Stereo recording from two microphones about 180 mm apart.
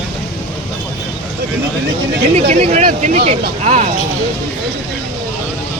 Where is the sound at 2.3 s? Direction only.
40° right (ahead or behind).